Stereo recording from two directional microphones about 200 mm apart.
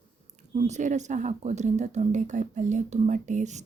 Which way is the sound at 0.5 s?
35° right (ahead or behind).